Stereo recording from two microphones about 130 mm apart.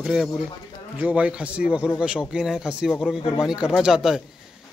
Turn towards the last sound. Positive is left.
turn(degrees=-5)  # may be behind; listen again after turning